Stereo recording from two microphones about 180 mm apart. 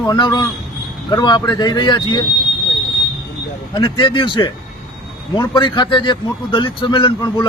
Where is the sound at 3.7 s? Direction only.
25° left (ahead or behind).